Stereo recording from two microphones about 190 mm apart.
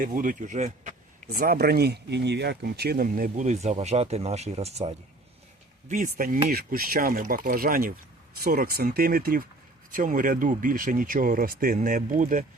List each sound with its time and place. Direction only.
0.0 s speech: 45° right (ahead or behind)
1.4 s speech: 55° right (ahead or behind); by 4.9 s 35° right (ahead or behind)
5.9 s speech: 45° right (ahead or behind)